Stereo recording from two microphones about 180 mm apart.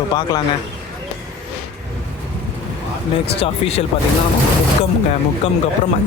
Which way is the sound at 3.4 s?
35° left (ahead or behind).